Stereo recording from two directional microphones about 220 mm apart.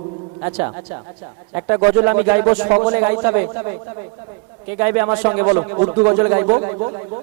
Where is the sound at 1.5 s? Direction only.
20° right (ahead or behind).